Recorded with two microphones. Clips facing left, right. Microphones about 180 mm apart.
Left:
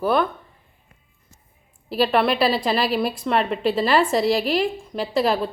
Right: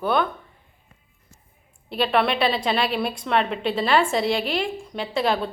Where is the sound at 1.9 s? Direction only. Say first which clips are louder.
Left 2 dB; centre (ahead or behind).